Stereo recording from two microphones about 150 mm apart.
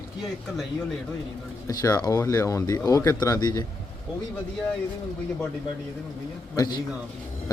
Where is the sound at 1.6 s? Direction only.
20° left (ahead or behind).